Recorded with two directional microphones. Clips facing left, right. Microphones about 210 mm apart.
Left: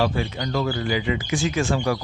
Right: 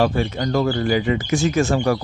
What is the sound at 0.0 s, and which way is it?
Speech, 45° right (ahead or behind).